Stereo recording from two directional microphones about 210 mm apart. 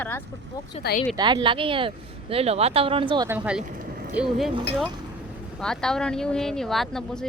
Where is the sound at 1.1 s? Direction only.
20° right (ahead or behind).